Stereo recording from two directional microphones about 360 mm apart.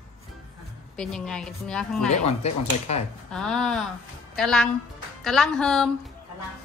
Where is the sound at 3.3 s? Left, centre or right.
Centre.